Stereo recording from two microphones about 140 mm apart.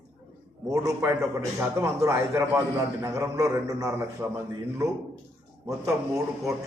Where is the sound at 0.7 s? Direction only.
25° right (ahead or behind).